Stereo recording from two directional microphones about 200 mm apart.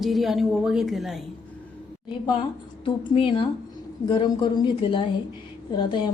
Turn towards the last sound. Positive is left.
turn(degrees=20)  # may be behind; listen again after turning